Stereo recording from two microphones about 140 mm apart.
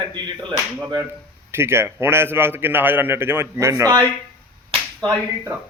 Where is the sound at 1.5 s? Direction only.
15° right (ahead or behind).